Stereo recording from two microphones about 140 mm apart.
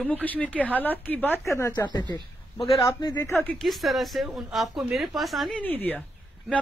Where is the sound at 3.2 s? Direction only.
15° left (ahead or behind).